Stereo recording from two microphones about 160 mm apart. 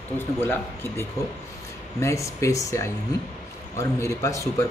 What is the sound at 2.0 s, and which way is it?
Speech, 20° left (ahead or behind).